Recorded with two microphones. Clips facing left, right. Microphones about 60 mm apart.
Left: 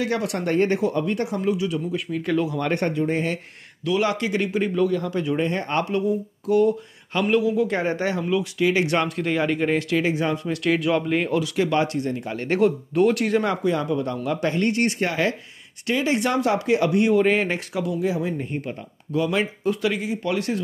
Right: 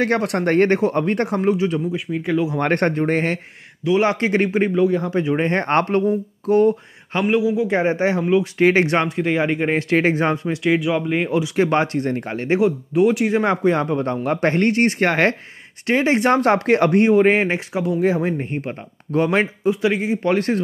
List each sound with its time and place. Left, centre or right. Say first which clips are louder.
0.0 s speech: right 5 dB; right
1.5 s speech: right 4 dB; right
1.9 s speech: right 2 dB; centre
2.6 s speech: right 4 dB; right
3.8 s speech: right 5 dB; right
5.5 s speech: right 6 dB; right
7.2 s speech: right 2 dB; centre; by 10.5 s right
10.5 s speech: right 2 dB; centre
11.5 s speech: right 5 dB; right
12.4 s speech: right 2 dB; centre
13.4 s speech: right 5 dB; right
15.0 s speech: right 6 dB; right
15.9 s speech: right 5 dB; right
19.6 s speech: right 4 dB; right